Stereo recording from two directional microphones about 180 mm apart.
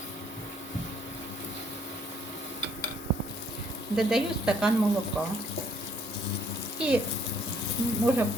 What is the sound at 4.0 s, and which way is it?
Speech, 5° right (ahead or behind).